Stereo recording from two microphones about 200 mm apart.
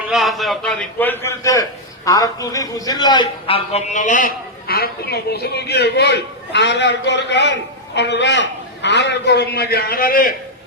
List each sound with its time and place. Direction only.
0.1 s a man's voice: centre (ahead or behind); by 10.3 s 45° left (ahead or behind)